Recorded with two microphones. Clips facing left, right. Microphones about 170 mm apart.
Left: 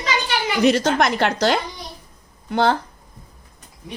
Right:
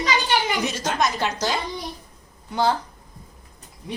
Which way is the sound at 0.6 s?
65° left (ahead or behind).